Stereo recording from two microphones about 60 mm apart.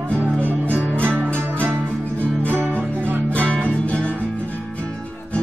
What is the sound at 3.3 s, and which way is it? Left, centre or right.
Music, left.